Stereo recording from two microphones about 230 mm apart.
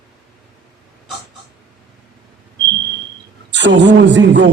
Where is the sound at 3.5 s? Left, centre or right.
Right.